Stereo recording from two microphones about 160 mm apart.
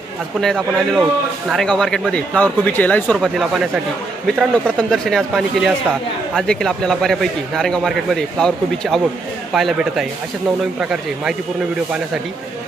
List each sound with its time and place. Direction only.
0.4 s a man's voice: centre (ahead or behind)